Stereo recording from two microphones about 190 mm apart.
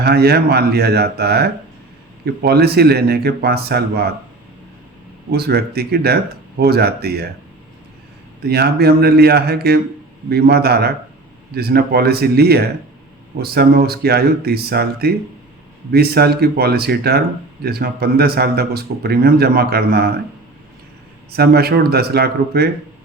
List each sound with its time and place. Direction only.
0.0 s speech: 55° right (ahead or behind)
5.3 s speech: 55° right (ahead or behind)
8.4 s speech: 55° right (ahead or behind)
21.3 s speech: 55° right (ahead or behind)